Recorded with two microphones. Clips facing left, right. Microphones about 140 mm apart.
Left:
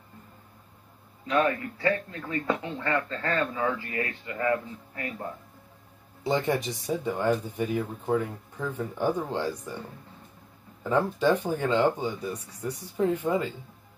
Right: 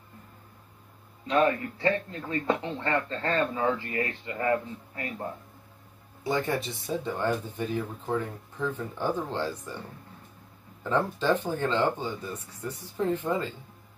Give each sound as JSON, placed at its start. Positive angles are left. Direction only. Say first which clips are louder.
{"t": 1.2, "sound": "speech", "louder": "right 1 dB", "side_deg": -30}
{"t": 6.2, "sound": "speech", "louder": "left 2 dB", "side_deg": 20}
{"t": 10.8, "sound": "speech", "louder": "left 3 dB", "side_deg": 10}